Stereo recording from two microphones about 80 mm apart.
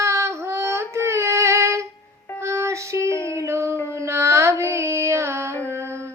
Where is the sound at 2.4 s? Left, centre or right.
Right.